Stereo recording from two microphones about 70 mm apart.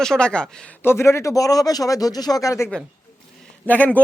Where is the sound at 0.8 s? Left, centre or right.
Left.